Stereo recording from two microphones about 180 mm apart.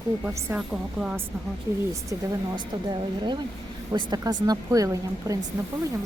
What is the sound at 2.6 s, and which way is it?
A woman's voice, 25° right (ahead or behind).